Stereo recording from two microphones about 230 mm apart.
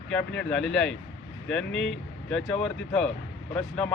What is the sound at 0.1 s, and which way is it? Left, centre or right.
Speech, centre.